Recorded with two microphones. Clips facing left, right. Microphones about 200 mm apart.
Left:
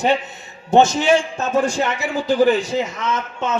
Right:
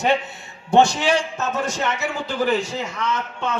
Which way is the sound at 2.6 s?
15° left (ahead or behind).